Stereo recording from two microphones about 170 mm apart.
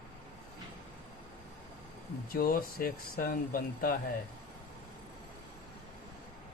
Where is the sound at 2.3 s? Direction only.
55° left (ahead or behind).